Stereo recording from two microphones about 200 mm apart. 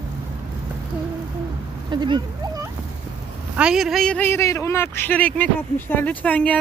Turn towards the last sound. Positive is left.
turn(degrees=5)  # may be behind; listen again after turning